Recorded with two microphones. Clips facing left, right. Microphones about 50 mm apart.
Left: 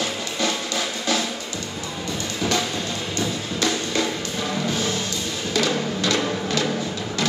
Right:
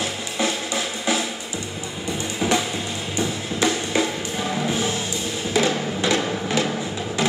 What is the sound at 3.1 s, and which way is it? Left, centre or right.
Music, centre.